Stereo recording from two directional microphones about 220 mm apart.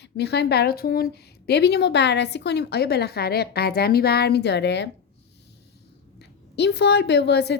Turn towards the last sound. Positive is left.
turn(degrees=50)  # may be behind; listen again after turning